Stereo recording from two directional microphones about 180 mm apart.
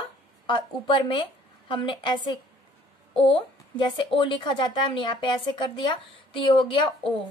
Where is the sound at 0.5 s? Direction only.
30° left (ahead or behind).